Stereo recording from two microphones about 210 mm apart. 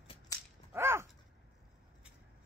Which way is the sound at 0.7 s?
10° right (ahead or behind).